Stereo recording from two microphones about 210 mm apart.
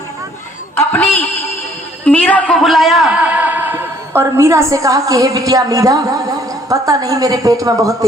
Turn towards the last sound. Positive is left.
turn(degrees=-15)  # may be behind; listen again after turning